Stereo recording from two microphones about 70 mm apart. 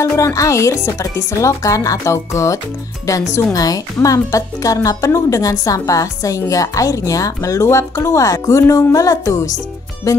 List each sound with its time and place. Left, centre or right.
0.0 s speech: left